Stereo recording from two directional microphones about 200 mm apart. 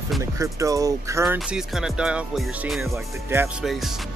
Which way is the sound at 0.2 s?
15° right (ahead or behind).